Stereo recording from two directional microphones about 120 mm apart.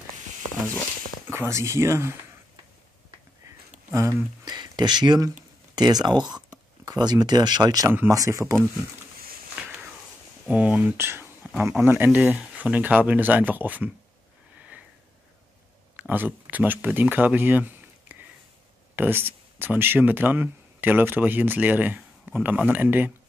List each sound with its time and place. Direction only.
1.3 s speech: 20° right (ahead or behind)
3.9 s speech: 25° right (ahead or behind)
4.6 s speech: 40° right (ahead or behind)
9.6 s a sound: 10° right (ahead or behind)
10.4 s speech: 10° right (ahead or behind)
11.4 s a sound: 15° right (ahead or behind)
11.8 s speech: 15° right (ahead or behind)
16.0 s speech: 15° right (ahead or behind)